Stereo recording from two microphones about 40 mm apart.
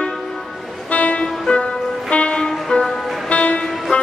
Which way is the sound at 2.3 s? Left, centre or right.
Centre.